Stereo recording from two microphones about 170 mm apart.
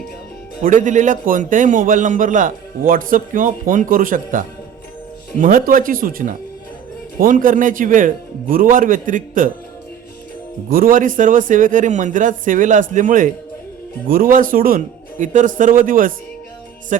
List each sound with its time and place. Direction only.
0.6 s a man's voice: 50° right (ahead or behind)
10.7 s a man's voice: 60° right (ahead or behind)